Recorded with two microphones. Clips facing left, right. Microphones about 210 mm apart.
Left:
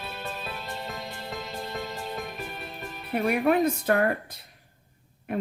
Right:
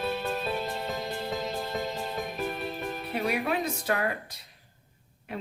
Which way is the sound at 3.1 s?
55° left (ahead or behind).